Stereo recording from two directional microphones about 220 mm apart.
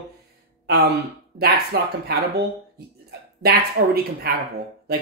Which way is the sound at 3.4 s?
45° right (ahead or behind).